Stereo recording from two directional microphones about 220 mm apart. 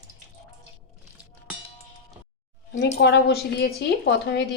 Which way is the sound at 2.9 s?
50° left (ahead or behind).